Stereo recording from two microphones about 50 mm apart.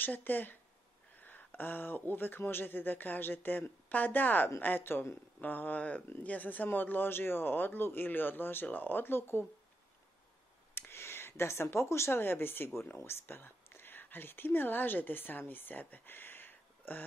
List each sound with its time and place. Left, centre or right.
0.0 s speech: left
10.7 s a sound: left
12.2 s speech: left